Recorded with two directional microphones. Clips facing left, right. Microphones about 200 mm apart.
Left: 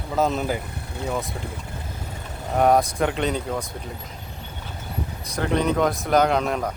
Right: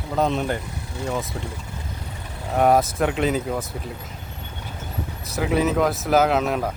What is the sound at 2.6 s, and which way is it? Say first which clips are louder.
Speech: right 1 dB; centre (ahead or behind).